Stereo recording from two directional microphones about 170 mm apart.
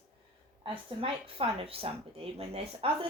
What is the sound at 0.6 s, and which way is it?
Speech, 30° right (ahead or behind).